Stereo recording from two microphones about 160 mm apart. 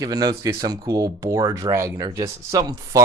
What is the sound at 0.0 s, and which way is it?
Speech, 25° right (ahead or behind).